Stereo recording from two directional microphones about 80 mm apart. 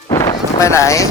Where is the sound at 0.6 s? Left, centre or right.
Left.